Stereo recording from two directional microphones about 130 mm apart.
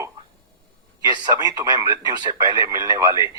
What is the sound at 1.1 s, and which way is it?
A man's voice, 30° right (ahead or behind).